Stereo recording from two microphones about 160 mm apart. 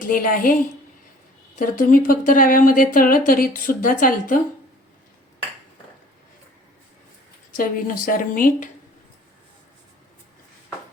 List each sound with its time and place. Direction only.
0.0 s speech: 60° left (ahead or behind)
1.5 s speech: 55° left (ahead or behind)
7.5 s speech: 60° left (ahead or behind)